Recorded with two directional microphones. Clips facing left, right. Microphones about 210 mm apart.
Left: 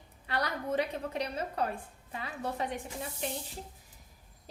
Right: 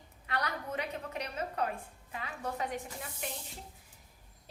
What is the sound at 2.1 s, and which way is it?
Speech, 35° left (ahead or behind).